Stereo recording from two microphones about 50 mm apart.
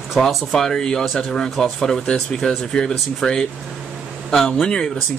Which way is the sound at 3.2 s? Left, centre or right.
Centre.